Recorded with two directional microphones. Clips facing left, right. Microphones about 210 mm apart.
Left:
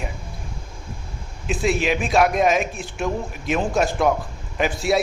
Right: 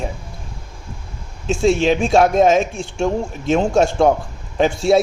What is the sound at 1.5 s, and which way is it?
A man's voice, 25° right (ahead or behind).